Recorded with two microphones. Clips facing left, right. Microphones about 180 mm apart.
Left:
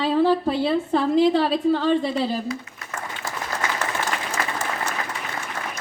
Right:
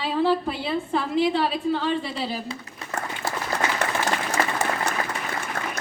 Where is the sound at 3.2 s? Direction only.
65° right (ahead or behind).